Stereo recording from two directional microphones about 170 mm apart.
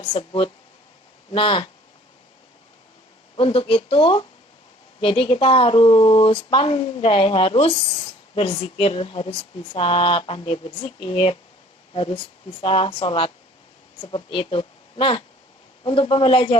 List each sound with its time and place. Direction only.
0.1 s speech: 30° left (ahead or behind)
3.3 s speech: 30° left (ahead or behind)
12.6 s speech: 30° left (ahead or behind)